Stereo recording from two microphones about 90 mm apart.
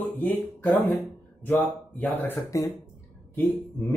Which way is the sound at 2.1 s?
20° left (ahead or behind).